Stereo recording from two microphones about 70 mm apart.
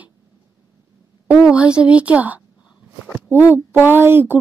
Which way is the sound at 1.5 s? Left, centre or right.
Centre.